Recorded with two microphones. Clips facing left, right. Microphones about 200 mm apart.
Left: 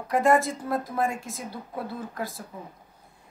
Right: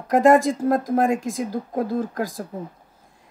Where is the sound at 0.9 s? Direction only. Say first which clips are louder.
Right 8 dB; 90° right.